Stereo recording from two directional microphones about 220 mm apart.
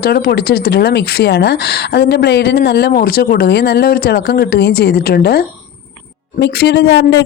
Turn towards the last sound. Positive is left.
turn(degrees=50)  # may be behind; listen again after turning